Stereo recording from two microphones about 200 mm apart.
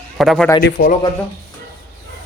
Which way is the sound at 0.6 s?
55° left (ahead or behind).